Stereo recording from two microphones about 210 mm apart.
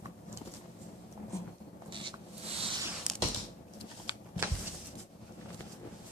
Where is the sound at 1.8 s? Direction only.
25° right (ahead or behind).